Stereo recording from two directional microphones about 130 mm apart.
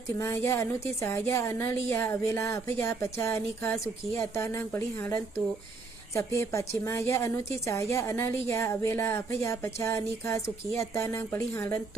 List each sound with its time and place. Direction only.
0.2 s speech: 20° left (ahead or behind)